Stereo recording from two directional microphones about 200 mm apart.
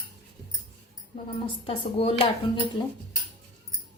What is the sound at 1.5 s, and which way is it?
Speech, 25° left (ahead or behind).